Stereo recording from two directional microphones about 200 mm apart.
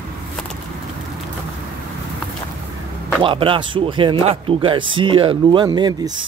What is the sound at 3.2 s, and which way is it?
Speech, 25° right (ahead or behind).